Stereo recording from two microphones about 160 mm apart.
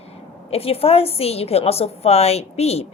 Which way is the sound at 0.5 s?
35° left (ahead or behind).